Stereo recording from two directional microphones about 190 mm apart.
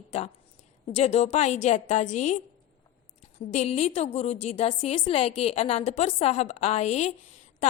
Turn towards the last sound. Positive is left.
turn(degrees=35)  # may be behind; listen again after turning